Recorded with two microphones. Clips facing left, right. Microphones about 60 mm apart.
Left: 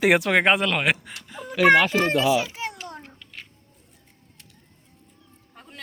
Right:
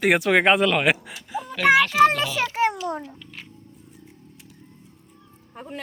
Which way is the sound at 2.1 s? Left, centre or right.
Centre.